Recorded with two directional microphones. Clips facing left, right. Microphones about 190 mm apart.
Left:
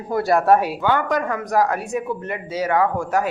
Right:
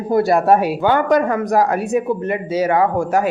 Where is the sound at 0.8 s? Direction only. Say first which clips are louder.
Right 6 dB; 30° right (ahead or behind).